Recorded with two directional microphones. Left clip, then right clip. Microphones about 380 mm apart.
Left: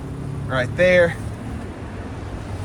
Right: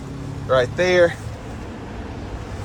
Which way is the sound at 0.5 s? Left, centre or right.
Centre.